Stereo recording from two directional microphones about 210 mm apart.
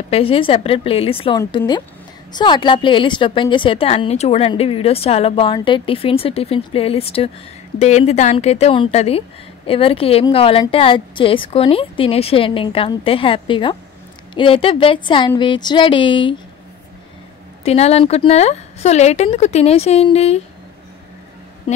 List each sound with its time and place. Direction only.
0.1 s a woman's voice: 25° left (ahead or behind)
17.6 s speech: 30° left (ahead or behind)